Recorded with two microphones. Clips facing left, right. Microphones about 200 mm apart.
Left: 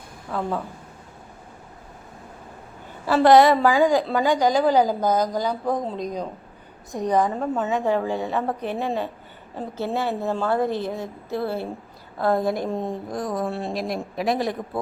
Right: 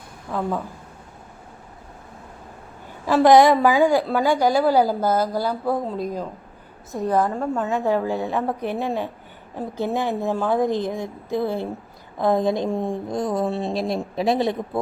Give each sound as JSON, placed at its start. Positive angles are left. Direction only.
{"t": 3.1, "sound": "a woman's voice", "side_deg": -10}
{"t": 7.7, "sound": "a woman's voice", "side_deg": -10}